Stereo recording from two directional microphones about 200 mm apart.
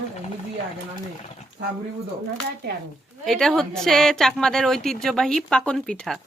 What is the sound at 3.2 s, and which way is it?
A woman's voice, centre (ahead or behind).